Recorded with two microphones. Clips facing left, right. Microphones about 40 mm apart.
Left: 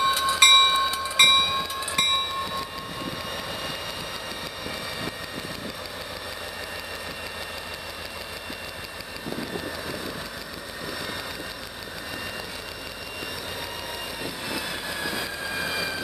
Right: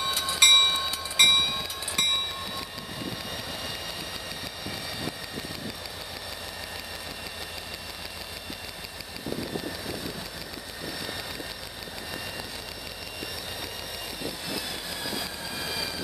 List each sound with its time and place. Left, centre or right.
0.0 s train: centre
14.5 s train: centre